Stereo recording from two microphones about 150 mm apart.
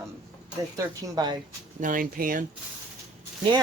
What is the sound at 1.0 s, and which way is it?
Speech, 30° right (ahead or behind).